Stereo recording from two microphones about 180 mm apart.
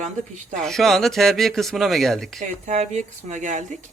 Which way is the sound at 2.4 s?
40° right (ahead or behind).